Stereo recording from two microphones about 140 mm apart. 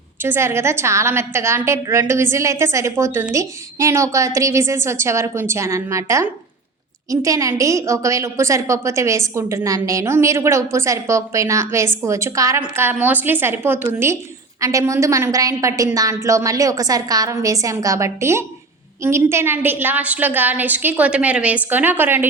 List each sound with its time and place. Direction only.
0.2 s a woman's voice: 15° right (ahead or behind)